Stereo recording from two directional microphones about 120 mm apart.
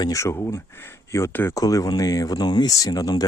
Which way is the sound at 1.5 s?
30° left (ahead or behind).